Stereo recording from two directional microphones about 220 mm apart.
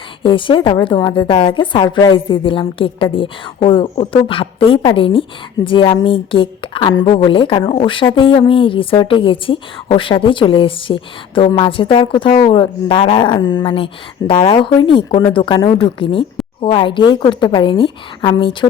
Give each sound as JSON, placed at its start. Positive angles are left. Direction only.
{"t": 0.2, "sound": "speech", "side_deg": 25}